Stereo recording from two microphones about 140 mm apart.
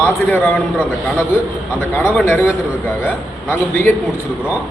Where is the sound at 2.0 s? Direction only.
10° left (ahead or behind).